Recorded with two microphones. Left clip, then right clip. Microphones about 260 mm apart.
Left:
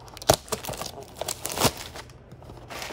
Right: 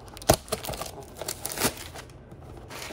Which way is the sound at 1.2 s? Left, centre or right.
Centre.